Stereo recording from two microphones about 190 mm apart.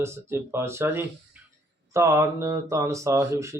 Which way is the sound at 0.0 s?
15° right (ahead or behind).